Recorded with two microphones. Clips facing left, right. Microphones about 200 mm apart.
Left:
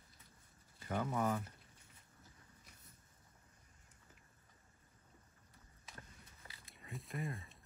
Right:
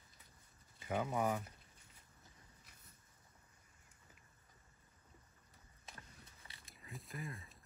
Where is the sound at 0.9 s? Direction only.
10° right (ahead or behind).